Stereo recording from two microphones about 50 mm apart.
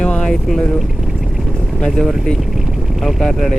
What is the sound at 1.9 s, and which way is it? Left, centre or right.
Speech, centre.